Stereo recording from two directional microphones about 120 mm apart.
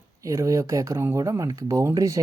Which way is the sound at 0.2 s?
25° right (ahead or behind).